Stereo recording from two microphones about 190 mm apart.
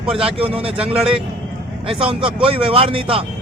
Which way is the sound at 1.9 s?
30° right (ahead or behind).